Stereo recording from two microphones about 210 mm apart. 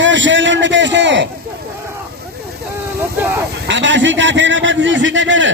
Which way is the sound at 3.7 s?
60° right (ahead or behind).